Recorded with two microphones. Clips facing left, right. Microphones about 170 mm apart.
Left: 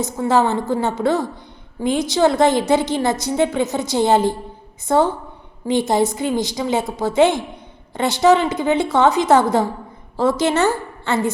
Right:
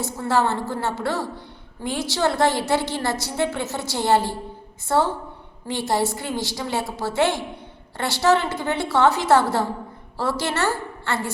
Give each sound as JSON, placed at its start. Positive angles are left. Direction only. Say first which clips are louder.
{"t": 0.0, "sound": "a woman's voice", "louder": "left 5 dB", "side_deg": 20}